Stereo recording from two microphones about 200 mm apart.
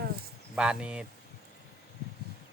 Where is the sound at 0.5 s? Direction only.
5° right (ahead or behind).